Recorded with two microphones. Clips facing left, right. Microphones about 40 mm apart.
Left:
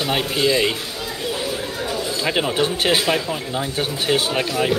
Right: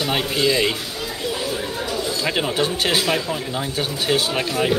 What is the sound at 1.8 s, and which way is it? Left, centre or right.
Chatter, centre.